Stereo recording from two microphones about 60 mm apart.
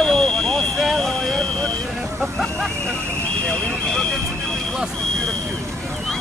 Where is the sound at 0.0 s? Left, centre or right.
Centre.